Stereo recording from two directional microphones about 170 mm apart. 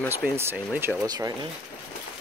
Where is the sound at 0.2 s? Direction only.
15° right (ahead or behind).